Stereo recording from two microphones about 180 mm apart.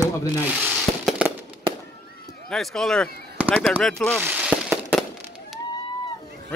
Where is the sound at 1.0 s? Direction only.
5° right (ahead or behind).